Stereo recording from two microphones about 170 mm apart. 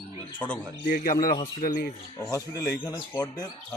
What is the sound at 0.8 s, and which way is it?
Speech, 55° left (ahead or behind).